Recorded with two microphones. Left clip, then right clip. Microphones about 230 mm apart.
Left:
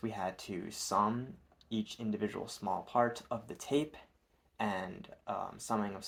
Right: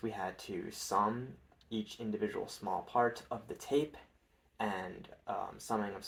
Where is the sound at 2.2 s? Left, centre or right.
Left.